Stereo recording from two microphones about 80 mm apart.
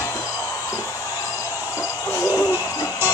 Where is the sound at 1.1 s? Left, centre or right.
Left.